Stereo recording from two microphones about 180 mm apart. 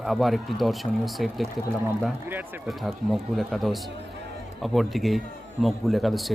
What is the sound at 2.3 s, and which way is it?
Speech, 10° right (ahead or behind).